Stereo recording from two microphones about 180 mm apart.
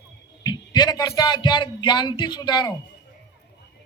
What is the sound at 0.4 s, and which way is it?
Speech, 20° left (ahead or behind).